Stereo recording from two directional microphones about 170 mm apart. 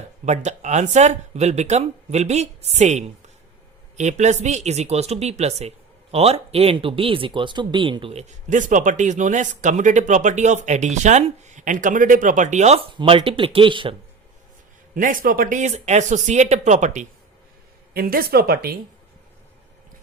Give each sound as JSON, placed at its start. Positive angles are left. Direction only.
{"t": 0.3, "sound": "speech", "side_deg": -45}
{"t": 8.3, "sound": "speech", "side_deg": -45}
{"t": 14.9, "sound": "speech", "side_deg": -50}
{"t": 17.9, "sound": "speech", "side_deg": -60}